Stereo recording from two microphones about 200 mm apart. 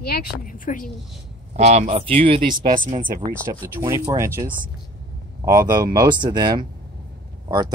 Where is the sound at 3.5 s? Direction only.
15° right (ahead or behind).